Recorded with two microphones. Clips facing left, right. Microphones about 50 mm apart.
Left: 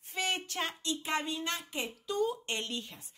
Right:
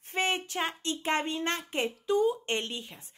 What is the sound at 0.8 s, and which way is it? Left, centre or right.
Speech, right.